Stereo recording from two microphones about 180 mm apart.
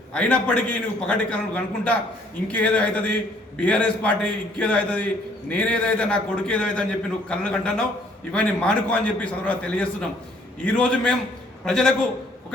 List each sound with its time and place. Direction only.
0.1 s a man's voice: 5° left (ahead or behind)